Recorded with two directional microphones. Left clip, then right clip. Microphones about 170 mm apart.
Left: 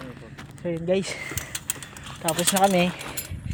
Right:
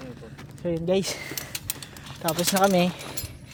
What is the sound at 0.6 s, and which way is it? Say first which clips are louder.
Speech: even; 30° right (ahead or behind).